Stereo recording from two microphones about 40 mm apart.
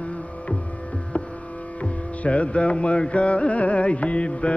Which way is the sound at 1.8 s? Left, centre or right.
Left.